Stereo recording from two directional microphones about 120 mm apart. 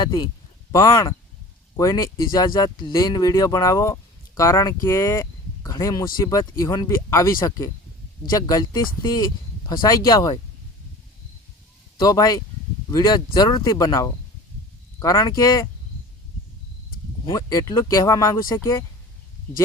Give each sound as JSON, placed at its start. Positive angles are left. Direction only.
{"t": 0.0, "sound": "speech", "side_deg": 35}
{"t": 11.9, "sound": "speech", "side_deg": 30}
{"t": 17.3, "sound": "speech", "side_deg": 30}